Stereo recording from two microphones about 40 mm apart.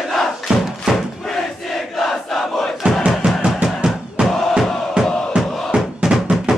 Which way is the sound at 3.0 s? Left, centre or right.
Centre.